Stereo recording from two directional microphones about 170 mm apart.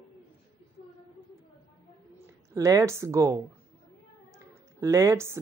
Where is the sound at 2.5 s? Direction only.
20° right (ahead or behind).